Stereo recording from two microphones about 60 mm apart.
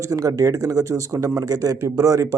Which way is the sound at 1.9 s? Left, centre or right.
Right.